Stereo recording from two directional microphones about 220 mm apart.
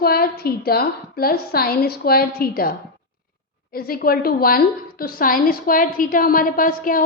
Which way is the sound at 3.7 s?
45° left (ahead or behind).